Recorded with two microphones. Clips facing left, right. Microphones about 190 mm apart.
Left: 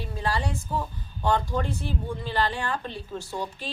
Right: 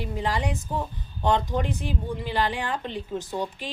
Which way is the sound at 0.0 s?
15° right (ahead or behind).